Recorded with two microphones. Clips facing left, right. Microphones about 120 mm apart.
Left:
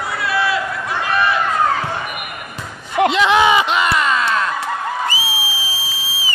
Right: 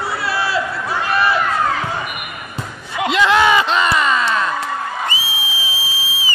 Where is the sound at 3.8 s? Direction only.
Centre (ahead or behind).